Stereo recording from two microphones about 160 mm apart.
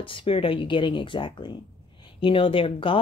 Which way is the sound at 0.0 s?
35° left (ahead or behind).